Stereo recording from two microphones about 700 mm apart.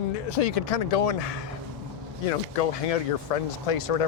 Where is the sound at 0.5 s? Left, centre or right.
Left.